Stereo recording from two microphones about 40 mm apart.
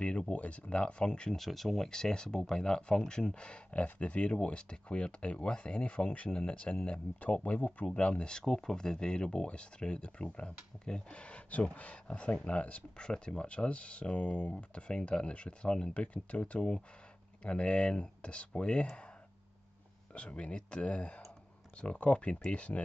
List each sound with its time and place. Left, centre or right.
0.3 s speech: left
1.3 s speech: centre
1.9 s speech: centre
3.7 s speech: left
20.2 s speech: left